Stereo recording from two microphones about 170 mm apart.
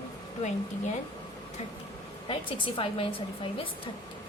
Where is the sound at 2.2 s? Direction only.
30° left (ahead or behind).